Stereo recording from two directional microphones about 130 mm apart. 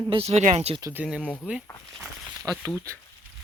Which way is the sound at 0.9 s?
5° right (ahead or behind).